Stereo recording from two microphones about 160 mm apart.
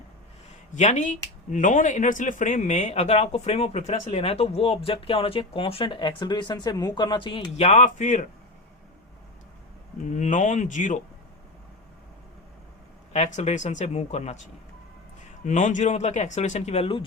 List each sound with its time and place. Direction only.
0.7 s speech: 50° left (ahead or behind); by 7.4 s 30° left (ahead or behind)
7.5 s speech: 45° left (ahead or behind)
10.1 s speech: 50° left (ahead or behind)
13.1 s speech: 45° left (ahead or behind)
15.4 s speech: 50° left (ahead or behind)